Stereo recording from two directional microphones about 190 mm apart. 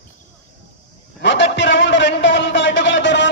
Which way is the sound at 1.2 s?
70° left (ahead or behind).